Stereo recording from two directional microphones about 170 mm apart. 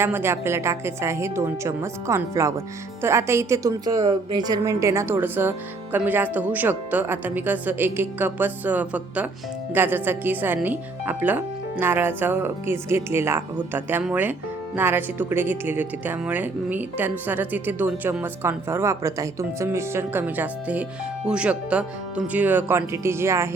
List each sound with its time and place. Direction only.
0.0 s a woman's voice: 15° right (ahead or behind)